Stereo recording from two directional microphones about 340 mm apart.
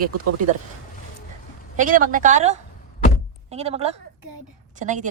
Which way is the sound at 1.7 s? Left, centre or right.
Right.